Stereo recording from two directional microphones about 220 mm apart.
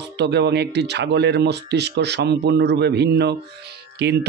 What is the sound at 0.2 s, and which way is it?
Speech, 50° right (ahead or behind).